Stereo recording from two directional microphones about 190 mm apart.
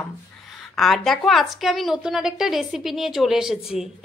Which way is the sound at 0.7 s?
Centre (ahead or behind).